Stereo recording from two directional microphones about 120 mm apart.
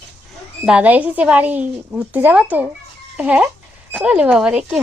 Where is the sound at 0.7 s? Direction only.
10° right (ahead or behind).